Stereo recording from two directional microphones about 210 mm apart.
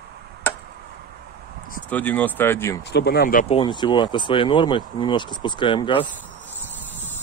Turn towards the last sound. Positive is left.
turn(degrees=25)  # may be behind; listen again after turning